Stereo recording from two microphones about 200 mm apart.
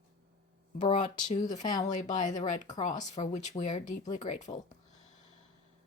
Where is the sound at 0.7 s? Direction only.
25° left (ahead or behind).